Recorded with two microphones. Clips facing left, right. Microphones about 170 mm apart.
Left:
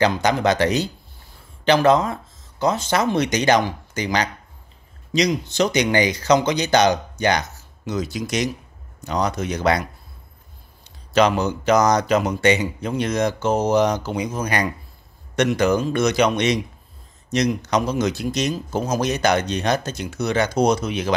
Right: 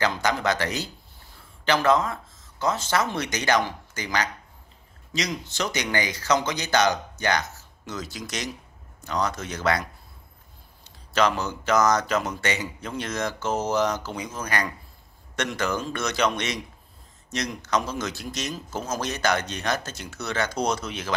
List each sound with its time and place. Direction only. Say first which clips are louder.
0.0 s speech: left 6 dB; 20° left (ahead or behind)
5.5 s speech: left 9 dB; 20° left (ahead or behind)